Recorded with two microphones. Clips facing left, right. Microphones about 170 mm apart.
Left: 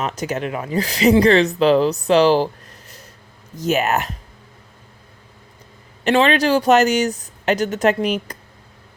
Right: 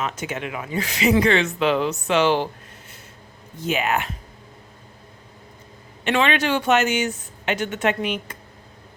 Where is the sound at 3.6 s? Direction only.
40° left (ahead or behind).